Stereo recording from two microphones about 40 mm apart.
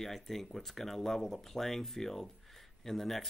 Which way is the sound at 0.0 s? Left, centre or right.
Centre.